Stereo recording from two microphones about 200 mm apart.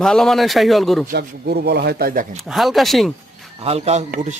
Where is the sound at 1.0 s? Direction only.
55° right (ahead or behind).